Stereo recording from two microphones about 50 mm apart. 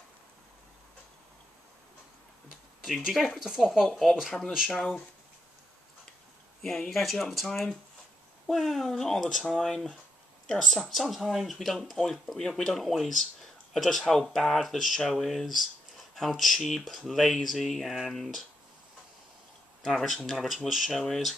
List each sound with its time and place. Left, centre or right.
3.1 s speech: centre
4.6 s speech: centre
6.6 s speech: centre
19.8 s speech: centre